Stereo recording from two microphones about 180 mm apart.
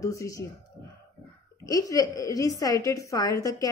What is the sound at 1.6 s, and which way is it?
A woman's voice, 20° left (ahead or behind).